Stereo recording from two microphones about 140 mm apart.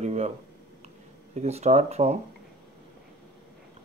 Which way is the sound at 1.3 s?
50° right (ahead or behind).